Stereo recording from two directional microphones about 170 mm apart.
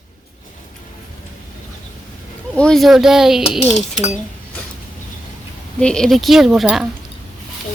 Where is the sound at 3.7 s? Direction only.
40° left (ahead or behind).